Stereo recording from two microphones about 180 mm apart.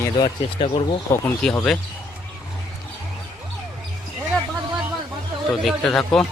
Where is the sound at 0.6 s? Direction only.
25° left (ahead or behind).